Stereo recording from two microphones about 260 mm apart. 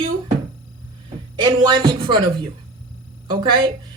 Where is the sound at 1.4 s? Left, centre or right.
Centre.